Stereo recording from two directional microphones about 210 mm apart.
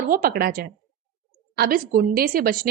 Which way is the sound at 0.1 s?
45° right (ahead or behind).